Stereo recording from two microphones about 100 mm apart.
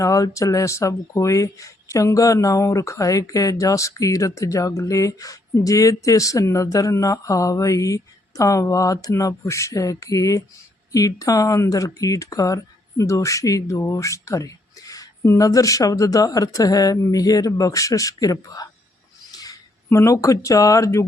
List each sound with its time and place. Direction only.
0.0 s speech: 35° left (ahead or behind)
19.3 s a sound: 40° left (ahead or behind)
20.0 s speech: 30° left (ahead or behind)